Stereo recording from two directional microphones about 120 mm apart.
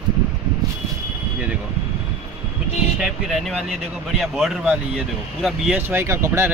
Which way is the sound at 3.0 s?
Centre (ahead or behind).